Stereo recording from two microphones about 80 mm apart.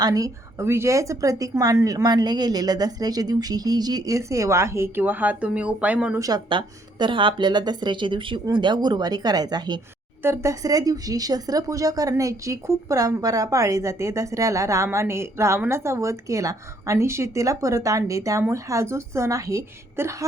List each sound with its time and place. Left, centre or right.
0.0 s speech: right
0.6 s a woman's voice: right
2.0 s speech: right
5.0 s speech: right
6.1 s speech: right
6.5 s speech: right
10.2 s a woman's voice: right